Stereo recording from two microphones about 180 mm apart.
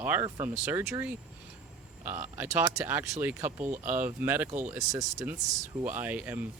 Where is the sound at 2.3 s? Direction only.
10° right (ahead or behind).